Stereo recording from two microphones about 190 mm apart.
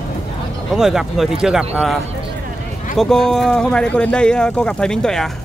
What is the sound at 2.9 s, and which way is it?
Speech, 5° left (ahead or behind).